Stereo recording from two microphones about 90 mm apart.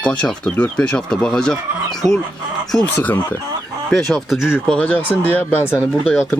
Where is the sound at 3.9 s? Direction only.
5° left (ahead or behind).